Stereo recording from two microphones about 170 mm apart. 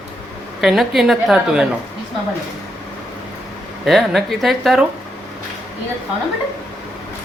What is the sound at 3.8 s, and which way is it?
A woman's voice, centre (ahead or behind).